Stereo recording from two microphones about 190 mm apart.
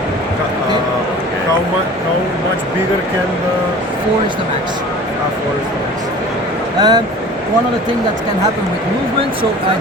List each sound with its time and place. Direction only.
6.7 s speech: 20° right (ahead or behind)